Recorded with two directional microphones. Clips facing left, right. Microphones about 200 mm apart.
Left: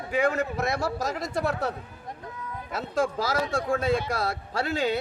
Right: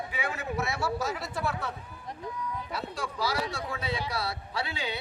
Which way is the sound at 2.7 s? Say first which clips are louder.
Left 8 dB; 50° left (ahead or behind).